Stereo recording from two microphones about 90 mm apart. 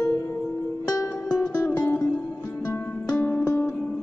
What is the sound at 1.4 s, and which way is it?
Music, 15° left (ahead or behind).